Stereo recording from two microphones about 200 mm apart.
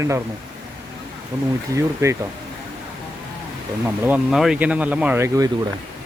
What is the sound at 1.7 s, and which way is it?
Speech, 15° right (ahead or behind).